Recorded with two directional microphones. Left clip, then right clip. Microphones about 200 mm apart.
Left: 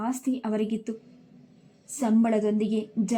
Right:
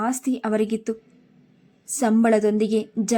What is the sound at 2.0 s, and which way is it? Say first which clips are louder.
A woman's voice: right 6 dB; 10° right (ahead or behind).